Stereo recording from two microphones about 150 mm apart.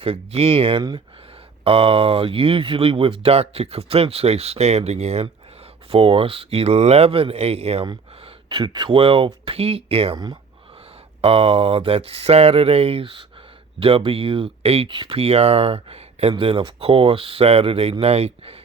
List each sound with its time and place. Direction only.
0.0 s speech: 40° right (ahead or behind)
8.4 s speech: 30° right (ahead or behind)
11.2 s speech: 40° right (ahead or behind)